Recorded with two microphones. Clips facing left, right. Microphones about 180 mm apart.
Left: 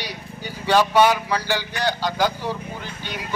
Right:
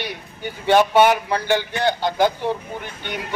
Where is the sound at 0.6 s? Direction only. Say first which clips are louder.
Right 2 dB; 20° right (ahead or behind).